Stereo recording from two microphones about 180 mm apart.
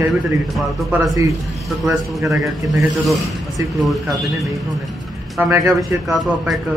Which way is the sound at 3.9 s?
Centre (ahead or behind).